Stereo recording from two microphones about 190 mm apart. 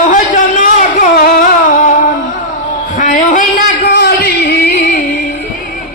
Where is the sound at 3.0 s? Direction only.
45° left (ahead or behind).